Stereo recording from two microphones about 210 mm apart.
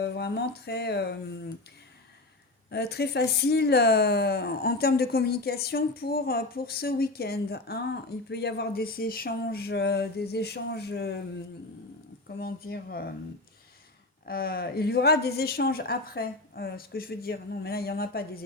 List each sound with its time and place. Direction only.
0.0 s speech: 50° left (ahead or behind)
2.6 s speech: 50° left (ahead or behind)
12.4 s speech: 45° left (ahead or behind)
14.3 s speech: 45° left (ahead or behind)